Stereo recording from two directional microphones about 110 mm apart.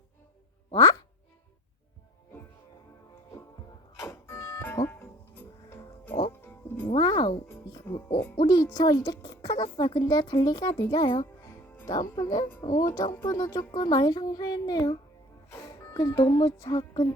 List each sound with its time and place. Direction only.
0.7 s speech: 35° left (ahead or behind)
4.0 s music: 20° left (ahead or behind)
6.8 s music: 45° left (ahead or behind)
7.9 s speech: 25° left (ahead or behind)
8.4 s a child's voice: 35° left (ahead or behind)
13.7 s a child's voice: 40° left (ahead or behind)
15.5 s music: 25° left (ahead or behind)
16.0 s a child's voice: 35° left (ahead or behind)